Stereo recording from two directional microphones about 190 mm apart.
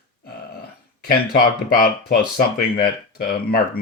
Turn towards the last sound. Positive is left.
turn(degrees=50)  # may be behind; listen again after turning